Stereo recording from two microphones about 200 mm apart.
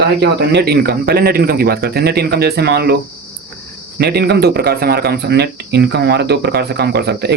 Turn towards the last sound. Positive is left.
turn(degrees=-55)  # may be behind; listen again after turning